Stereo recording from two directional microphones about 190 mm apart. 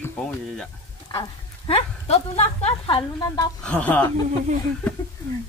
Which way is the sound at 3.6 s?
5° left (ahead or behind).